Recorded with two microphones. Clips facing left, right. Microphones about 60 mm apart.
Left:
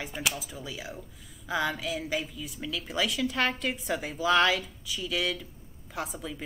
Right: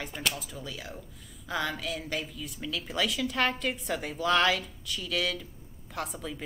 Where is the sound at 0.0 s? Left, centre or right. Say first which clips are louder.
Left 1 dB; centre.